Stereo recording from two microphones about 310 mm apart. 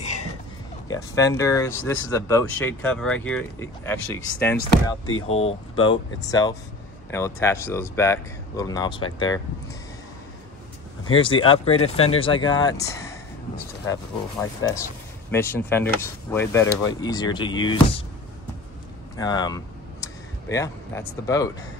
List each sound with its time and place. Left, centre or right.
0.8 s speech: centre
4.6 s speech: left
5.8 s speech: centre
11.1 s speech: centre
14.4 s speech: centre
19.1 s a sound: centre